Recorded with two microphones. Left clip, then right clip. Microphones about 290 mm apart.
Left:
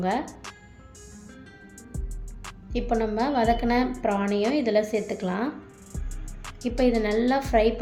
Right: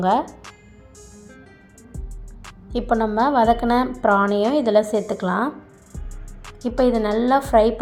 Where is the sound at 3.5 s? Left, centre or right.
Centre.